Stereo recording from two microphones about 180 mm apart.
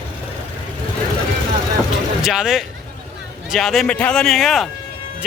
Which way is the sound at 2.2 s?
5° right (ahead or behind).